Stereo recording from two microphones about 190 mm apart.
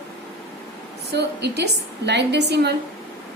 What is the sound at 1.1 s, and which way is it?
A woman's voice, 60° right (ahead or behind).